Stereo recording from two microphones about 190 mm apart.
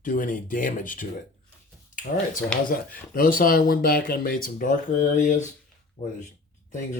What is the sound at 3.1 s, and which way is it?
Speech, 45° left (ahead or behind).